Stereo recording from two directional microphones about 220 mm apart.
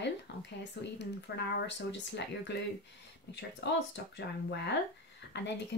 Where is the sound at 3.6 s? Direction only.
50° left (ahead or behind).